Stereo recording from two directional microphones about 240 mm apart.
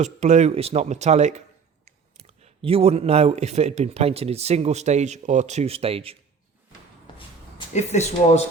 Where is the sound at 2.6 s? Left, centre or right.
Right.